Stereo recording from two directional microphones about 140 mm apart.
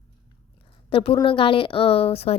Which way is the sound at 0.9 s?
40° left (ahead or behind).